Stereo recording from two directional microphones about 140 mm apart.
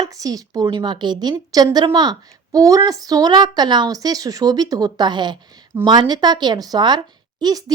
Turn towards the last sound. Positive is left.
turn(degrees=-25)  # may be behind; listen again after turning